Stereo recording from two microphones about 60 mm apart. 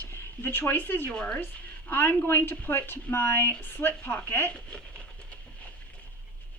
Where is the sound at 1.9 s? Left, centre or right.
Left.